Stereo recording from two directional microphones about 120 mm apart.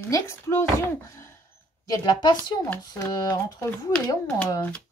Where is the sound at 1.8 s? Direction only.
35° left (ahead or behind).